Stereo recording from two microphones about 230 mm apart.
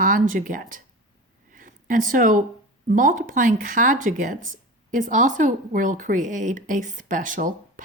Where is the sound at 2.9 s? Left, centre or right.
Right.